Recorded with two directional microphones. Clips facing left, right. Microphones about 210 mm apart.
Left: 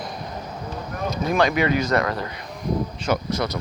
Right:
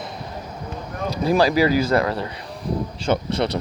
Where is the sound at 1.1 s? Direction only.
35° right (ahead or behind).